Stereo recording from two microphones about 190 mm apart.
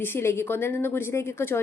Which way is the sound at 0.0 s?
10° left (ahead or behind).